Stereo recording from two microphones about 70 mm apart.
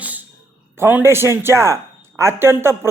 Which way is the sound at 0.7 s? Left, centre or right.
Right.